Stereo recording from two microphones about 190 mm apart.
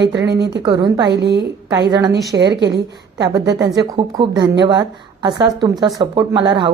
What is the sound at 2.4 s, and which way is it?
Speech, 65° right (ahead or behind).